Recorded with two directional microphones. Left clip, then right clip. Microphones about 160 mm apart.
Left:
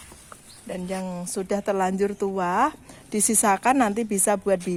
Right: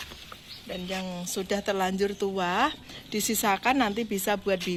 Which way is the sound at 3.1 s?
85° left.